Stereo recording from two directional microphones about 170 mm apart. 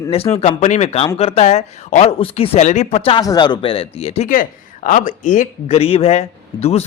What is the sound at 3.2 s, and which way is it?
A man's voice, 25° left (ahead or behind).